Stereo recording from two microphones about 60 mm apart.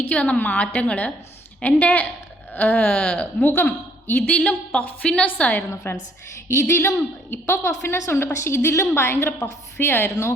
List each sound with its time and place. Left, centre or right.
0.1 s a woman's voice: left
3.4 s a woman's voice: left
4.4 s a woman's voice: left
6.5 s a woman's voice: left
7.6 s a woman's voice: left